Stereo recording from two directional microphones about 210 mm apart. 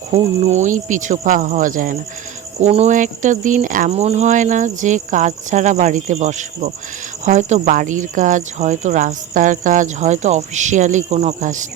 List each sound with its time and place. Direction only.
0.1 s speech: 35° right (ahead or behind)